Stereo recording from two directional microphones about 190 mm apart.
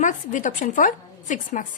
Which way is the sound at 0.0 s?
40° left (ahead or behind).